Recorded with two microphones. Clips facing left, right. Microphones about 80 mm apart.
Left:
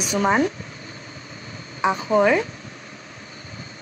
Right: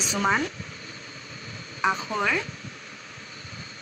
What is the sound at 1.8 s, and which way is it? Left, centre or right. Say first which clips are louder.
Speech: left 7 dB; left.